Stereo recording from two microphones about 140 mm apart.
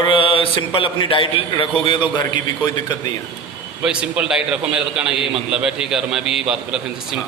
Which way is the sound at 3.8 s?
5° right (ahead or behind).